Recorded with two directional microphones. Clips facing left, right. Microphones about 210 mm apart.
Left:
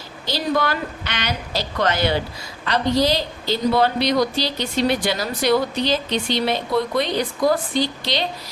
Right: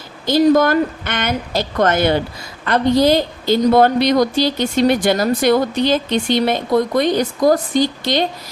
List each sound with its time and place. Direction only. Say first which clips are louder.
0.3 s a woman's voice: right 10 dB; 45° right (ahead or behind)